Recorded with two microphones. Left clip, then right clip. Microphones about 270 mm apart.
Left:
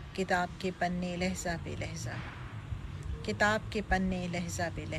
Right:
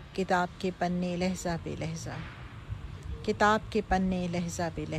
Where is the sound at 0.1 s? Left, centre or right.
Centre.